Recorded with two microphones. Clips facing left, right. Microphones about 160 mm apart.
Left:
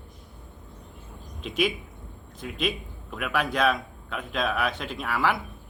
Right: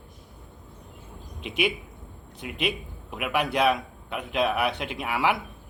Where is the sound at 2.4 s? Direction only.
70° right (ahead or behind).